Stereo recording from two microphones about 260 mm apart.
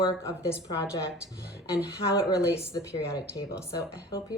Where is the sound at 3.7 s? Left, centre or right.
Centre.